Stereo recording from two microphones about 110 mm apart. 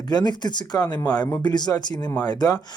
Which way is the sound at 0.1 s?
40° left (ahead or behind).